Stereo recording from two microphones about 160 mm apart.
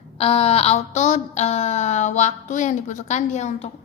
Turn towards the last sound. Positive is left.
turn(degrees=45)  # may be behind; listen again after turning